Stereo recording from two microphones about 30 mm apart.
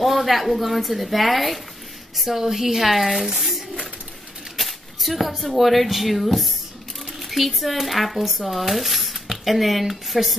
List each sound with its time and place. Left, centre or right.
0.0 s a woman's voice: centre
3.3 s speech: centre
4.6 s speech: centre